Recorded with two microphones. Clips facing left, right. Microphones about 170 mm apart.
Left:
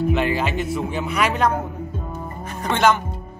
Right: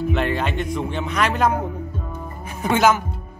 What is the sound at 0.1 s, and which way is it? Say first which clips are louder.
Speech: left 1 dB; 5° left (ahead or behind).